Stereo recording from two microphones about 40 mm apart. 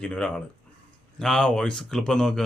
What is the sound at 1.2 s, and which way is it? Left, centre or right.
Speech, centre.